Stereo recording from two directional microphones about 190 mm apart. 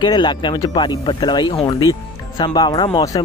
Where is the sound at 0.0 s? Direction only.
25° left (ahead or behind).